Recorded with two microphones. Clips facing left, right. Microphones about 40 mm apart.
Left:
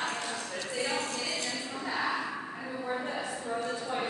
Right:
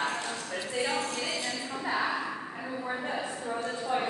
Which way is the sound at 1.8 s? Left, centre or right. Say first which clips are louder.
Right 3 dB; right.